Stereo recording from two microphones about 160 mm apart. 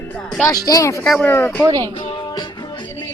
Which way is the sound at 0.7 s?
20° left (ahead or behind).